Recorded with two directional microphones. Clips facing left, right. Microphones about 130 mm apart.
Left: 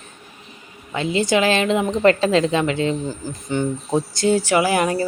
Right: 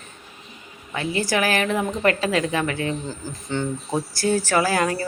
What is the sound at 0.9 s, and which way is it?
A woman's voice, 20° left (ahead or behind).